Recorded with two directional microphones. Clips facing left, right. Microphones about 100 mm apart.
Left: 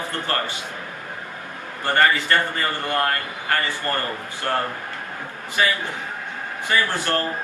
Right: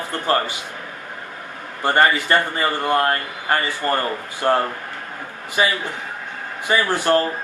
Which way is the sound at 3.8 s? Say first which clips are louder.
Right 4 dB; 20° right (ahead or behind).